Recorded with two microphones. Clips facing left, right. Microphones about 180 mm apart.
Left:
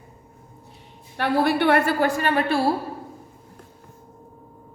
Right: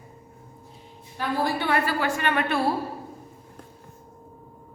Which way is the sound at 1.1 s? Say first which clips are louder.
Left 5 dB; 70° left (ahead or behind).